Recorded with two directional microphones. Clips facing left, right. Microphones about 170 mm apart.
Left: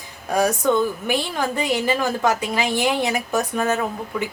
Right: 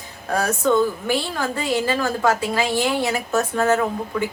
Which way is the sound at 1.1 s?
20° left (ahead or behind).